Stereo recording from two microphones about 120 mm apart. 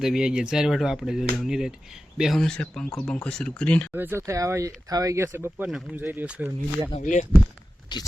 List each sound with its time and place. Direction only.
0.0 s speech: 5° right (ahead or behind)
3.9 s speech: 20° right (ahead or behind)
5.6 s speech: 5° right (ahead or behind)
6.0 s speech: 15° right (ahead or behind)
7.0 s speech: 90° left
7.9 s speech: 40° left (ahead or behind)